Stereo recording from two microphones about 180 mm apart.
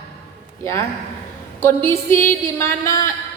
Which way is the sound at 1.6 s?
15° left (ahead or behind).